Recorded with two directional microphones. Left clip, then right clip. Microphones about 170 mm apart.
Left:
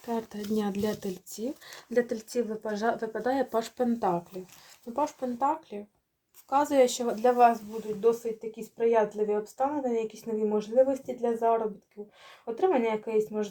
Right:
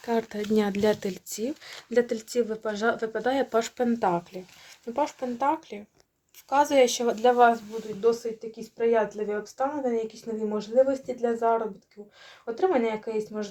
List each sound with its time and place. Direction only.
0.0 s speech: 35° right (ahead or behind)
1.9 s speech: 15° right (ahead or behind)
7.7 s speech: centre (ahead or behind)